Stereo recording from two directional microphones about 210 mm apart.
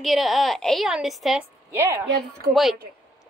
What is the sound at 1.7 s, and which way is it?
Speech, 15° right (ahead or behind).